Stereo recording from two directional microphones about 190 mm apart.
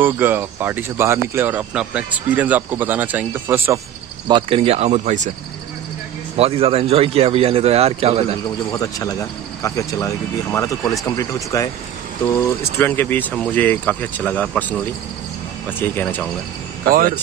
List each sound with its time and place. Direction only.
0.0 s speech: 10° right (ahead or behind)
4.3 s a man's voice: 30° right (ahead or behind)
6.3 s a man's voice: 30° right (ahead or behind)
8.7 s speech: 15° left (ahead or behind)
12.7 s speech: 10° left (ahead or behind)
15.8 s speech: 10° left (ahead or behind)